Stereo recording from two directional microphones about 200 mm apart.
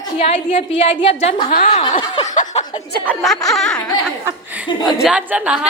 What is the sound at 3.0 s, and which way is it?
Speech, centre (ahead or behind).